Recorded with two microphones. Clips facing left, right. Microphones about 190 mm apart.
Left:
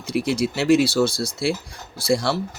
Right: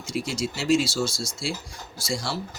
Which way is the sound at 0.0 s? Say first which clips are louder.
Left 7 dB; 60° left (ahead or behind).